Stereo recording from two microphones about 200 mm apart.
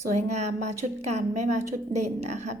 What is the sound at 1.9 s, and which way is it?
Speech, 35° right (ahead or behind).